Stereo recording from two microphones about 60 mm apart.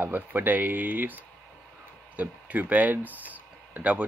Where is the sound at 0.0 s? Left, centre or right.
Right.